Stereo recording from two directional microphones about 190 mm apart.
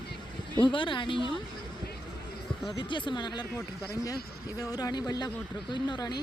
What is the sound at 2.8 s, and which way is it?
Speech, 25° left (ahead or behind).